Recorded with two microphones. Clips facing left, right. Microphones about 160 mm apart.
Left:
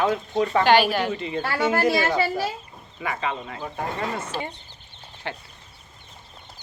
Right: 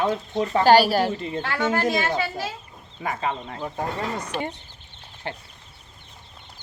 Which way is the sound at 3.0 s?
35° right (ahead or behind).